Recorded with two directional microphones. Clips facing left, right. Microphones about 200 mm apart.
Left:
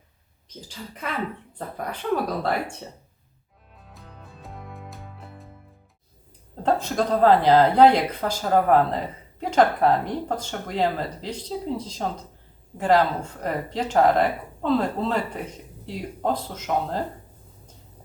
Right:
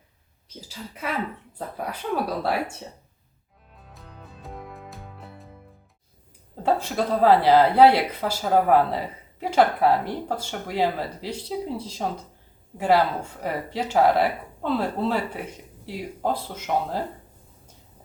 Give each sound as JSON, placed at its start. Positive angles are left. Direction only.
{"t": 1.0, "sound": "speech", "side_deg": -5}
{"t": 2.4, "sound": "speech", "side_deg": -5}
{"t": 3.8, "sound": "music", "side_deg": 0}
{"t": 6.6, "sound": "speech", "side_deg": -10}